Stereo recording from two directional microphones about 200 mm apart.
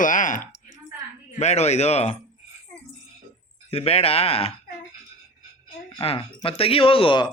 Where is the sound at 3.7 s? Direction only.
30° left (ahead or behind).